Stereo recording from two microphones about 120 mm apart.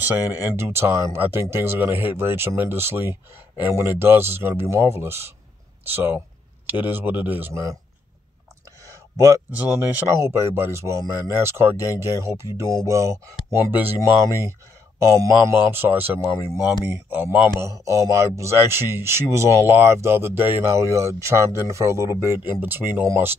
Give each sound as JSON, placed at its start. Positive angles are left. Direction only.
{"t": 0.0, "sound": "a man's voice", "side_deg": -20}
{"t": 9.2, "sound": "a man's voice", "side_deg": -20}